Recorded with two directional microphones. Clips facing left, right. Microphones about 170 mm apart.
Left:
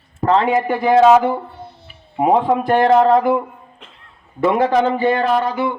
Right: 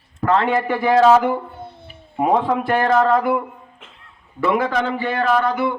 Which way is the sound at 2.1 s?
20° left (ahead or behind).